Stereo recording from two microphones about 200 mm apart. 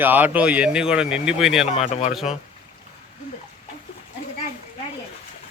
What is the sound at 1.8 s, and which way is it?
Speech, 30° left (ahead or behind).